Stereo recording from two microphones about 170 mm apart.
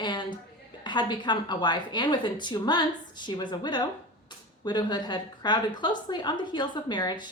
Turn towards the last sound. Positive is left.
turn(degrees=25)  # may be behind; listen again after turning